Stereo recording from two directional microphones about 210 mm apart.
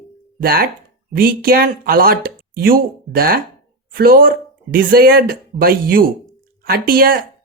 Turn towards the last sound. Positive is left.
turn(degrees=-45)  # may be behind; listen again after turning